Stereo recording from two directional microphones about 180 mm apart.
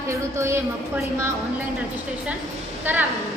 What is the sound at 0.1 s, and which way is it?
Speech, 15° right (ahead or behind).